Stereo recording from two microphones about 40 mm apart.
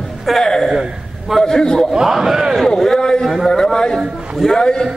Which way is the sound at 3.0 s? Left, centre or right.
Centre.